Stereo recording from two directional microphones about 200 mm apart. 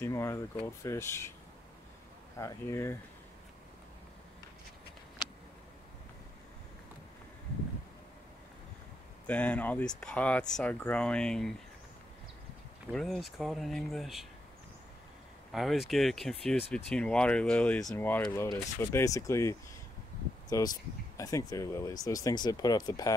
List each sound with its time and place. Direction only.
0.0 s speech: 15° left (ahead or behind)
2.3 s speech: 15° left (ahead or behind)
9.3 s speech: 5° left (ahead or behind)
12.9 s speech: centre (ahead or behind)
15.5 s speech: centre (ahead or behind); by 23.1 s 20° left (ahead or behind)